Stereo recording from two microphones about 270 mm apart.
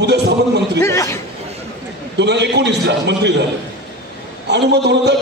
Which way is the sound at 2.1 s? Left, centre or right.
Right.